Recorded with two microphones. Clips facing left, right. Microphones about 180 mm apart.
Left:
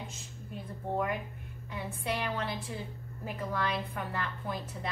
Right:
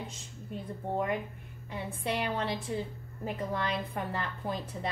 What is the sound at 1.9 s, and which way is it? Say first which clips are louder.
A woman's voice: right 2 dB; 30° right (ahead or behind).